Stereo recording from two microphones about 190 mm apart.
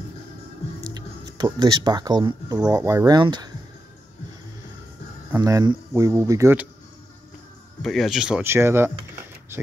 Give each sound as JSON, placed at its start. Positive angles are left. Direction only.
{"t": 1.4, "sound": "speech", "side_deg": -20}
{"t": 5.3, "sound": "speech", "side_deg": -20}
{"t": 7.8, "sound": "speech", "side_deg": 0}